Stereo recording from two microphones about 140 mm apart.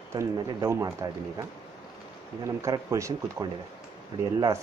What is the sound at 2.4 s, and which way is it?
Speech, 20° right (ahead or behind).